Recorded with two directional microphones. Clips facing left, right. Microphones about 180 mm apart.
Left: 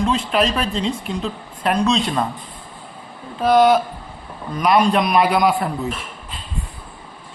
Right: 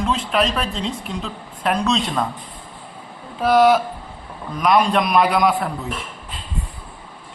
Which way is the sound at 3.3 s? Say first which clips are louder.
Left 1 dB; 5° right (ahead or behind).